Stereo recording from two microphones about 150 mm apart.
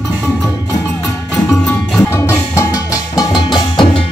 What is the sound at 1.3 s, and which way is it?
Music, 5° left (ahead or behind).